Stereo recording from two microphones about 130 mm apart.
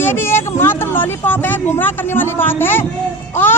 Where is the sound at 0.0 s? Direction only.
15° left (ahead or behind).